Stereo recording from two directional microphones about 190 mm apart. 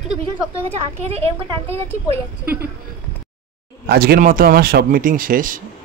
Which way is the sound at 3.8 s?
50° right (ahead or behind).